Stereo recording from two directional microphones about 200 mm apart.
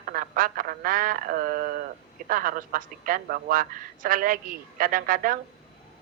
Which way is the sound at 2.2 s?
45° right (ahead or behind).